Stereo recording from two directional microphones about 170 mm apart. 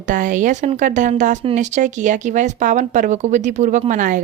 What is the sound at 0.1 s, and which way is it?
Speech, 50° right (ahead or behind).